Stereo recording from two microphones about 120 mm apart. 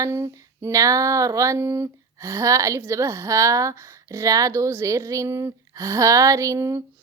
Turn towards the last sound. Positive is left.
turn(degrees=-25)  # may be behind; listen again after turning